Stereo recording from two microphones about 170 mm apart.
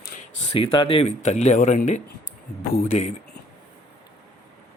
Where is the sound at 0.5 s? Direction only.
30° left (ahead or behind).